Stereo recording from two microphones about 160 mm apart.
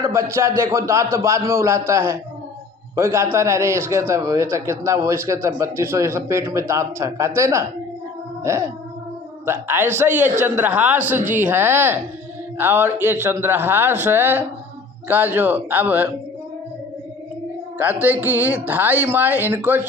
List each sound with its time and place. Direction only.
0.0 s a man's voice: 15° right (ahead or behind)
17.7 s a man's voice: 10° right (ahead or behind)